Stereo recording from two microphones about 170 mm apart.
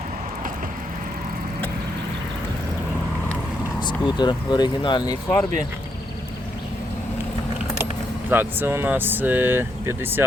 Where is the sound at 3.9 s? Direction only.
25° left (ahead or behind).